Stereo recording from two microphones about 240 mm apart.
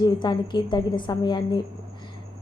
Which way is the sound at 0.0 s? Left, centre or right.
Centre.